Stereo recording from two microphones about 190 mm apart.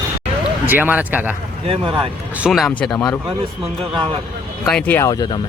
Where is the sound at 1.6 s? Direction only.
30° right (ahead or behind).